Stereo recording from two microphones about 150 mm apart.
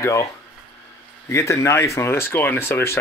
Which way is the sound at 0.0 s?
20° left (ahead or behind).